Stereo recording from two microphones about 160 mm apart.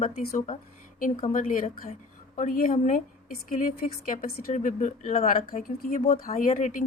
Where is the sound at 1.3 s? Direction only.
55° left (ahead or behind).